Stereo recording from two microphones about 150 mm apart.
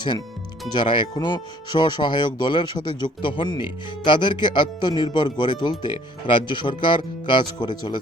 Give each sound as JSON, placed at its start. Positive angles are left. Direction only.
{"t": 0.7, "sound": "speech", "side_deg": 30}